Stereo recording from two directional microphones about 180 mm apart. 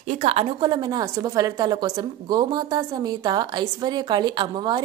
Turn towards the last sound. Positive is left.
turn(degrees=-25)  # may be behind; listen again after turning